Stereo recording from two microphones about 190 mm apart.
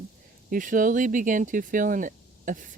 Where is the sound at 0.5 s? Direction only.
45° right (ahead or behind).